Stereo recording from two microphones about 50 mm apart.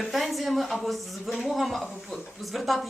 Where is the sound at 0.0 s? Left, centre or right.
Centre.